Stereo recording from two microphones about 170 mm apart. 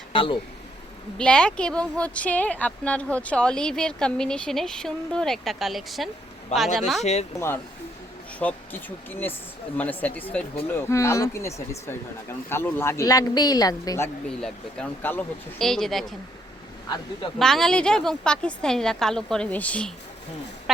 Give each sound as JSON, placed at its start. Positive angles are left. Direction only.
{"t": 0.1, "sound": "speech", "side_deg": 30}
{"t": 1.2, "sound": "speech", "side_deg": 5}
{"t": 7.0, "sound": "speech", "side_deg": 40}
{"t": 7.3, "sound": "speech", "side_deg": 15}
{"t": 14.3, "sound": "speech", "side_deg": 5}
{"t": 17.3, "sound": "speech", "side_deg": 0}